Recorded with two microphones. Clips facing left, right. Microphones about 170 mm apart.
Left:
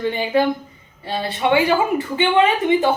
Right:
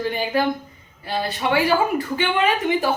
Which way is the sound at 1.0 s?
25° left (ahead or behind).